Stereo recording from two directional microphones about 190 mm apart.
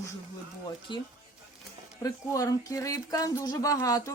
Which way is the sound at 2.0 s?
20° left (ahead or behind).